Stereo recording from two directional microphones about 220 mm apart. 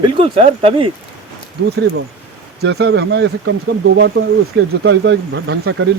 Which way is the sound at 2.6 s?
50° right (ahead or behind).